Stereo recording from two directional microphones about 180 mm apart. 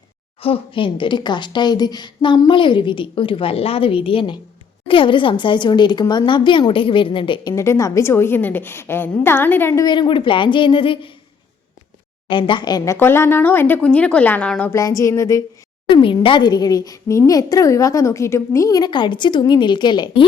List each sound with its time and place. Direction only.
0.4 s a woman's voice: 30° left (ahead or behind)
7.5 s a woman's voice: 15° left (ahead or behind)
9.8 s a woman's voice: 25° left (ahead or behind)
12.3 s a woman's voice: 25° left (ahead or behind)